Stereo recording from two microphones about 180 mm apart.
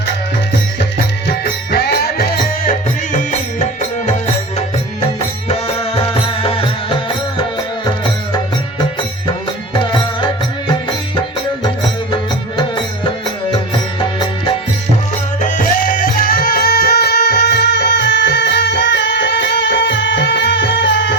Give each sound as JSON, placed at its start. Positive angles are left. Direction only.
{"t": 1.7, "sound": "music", "side_deg": 60}
{"t": 5.5, "sound": "music", "side_deg": 35}
{"t": 12.1, "sound": "music", "side_deg": 25}
{"t": 15.4, "sound": "music", "side_deg": 45}